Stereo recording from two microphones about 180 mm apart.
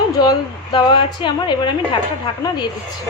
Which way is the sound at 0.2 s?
25° left (ahead or behind).